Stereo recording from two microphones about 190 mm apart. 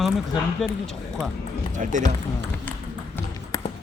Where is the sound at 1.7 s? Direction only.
40° right (ahead or behind).